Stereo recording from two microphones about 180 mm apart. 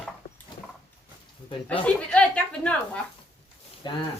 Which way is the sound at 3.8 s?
25° left (ahead or behind).